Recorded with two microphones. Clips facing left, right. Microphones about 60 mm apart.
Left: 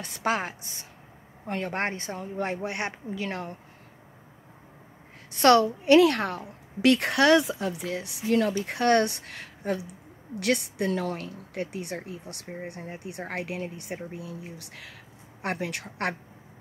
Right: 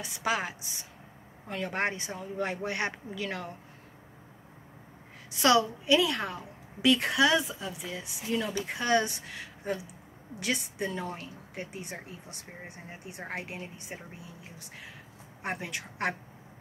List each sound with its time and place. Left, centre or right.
0.0 s speech: left
5.3 s a woman's voice: left